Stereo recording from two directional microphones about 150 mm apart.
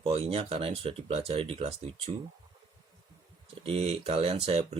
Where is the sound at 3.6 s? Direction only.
40° right (ahead or behind).